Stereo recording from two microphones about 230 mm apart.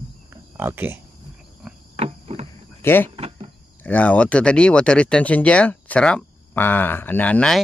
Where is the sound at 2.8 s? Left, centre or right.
Centre.